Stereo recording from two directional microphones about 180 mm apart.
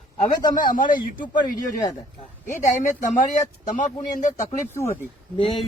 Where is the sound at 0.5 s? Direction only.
50° left (ahead or behind).